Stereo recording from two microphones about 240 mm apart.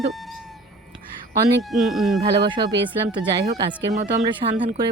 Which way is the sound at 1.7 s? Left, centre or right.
Centre.